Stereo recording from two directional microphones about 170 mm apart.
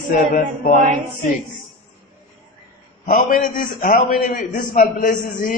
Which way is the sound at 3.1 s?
55° left (ahead or behind).